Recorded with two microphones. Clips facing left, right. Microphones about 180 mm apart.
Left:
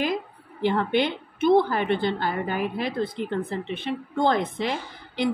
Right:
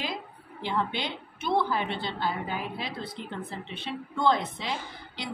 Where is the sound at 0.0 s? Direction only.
55° left (ahead or behind).